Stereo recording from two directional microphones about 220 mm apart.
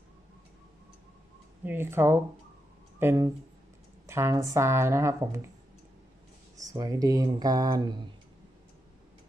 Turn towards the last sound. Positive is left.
turn(degrees=-20)  # may be behind; listen again after turning